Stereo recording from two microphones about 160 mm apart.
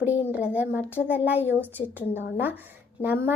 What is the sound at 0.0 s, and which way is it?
Speech, 10° right (ahead or behind).